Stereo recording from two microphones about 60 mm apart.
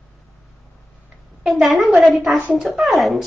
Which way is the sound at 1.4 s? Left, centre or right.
Centre.